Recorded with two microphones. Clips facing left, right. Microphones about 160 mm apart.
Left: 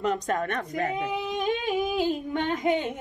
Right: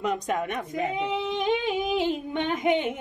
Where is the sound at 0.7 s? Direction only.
20° right (ahead or behind).